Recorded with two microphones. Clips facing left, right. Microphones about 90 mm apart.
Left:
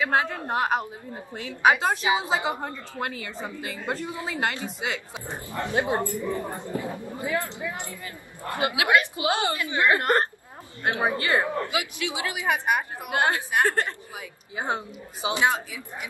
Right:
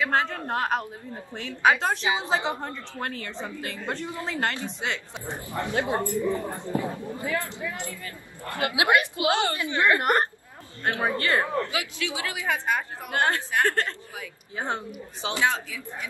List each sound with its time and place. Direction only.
0.0 s a woman's voice: 10° left (ahead or behind)
5.2 s a man's voice: 20° right (ahead or behind)
5.7 s speech: 20° left (ahead or behind)
6.0 s a man's voice: 20° right (ahead or behind)
6.9 s a woman's voice: 20° left (ahead or behind)
15.2 s speech: 20° left (ahead or behind)